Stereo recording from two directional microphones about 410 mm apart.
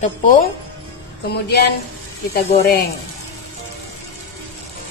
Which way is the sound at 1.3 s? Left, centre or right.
Left.